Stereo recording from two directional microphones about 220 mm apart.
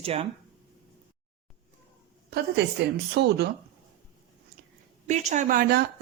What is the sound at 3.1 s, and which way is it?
Speech, 50° right (ahead or behind).